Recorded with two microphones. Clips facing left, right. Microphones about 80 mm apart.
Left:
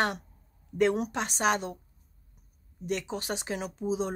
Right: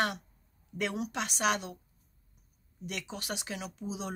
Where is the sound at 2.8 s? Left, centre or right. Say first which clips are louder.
Left 7 dB; left.